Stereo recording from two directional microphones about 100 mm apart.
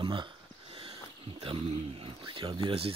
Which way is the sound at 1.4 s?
65° right (ahead or behind).